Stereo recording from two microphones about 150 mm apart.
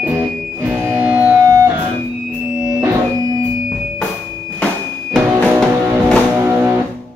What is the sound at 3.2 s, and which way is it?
Music, 25° right (ahead or behind).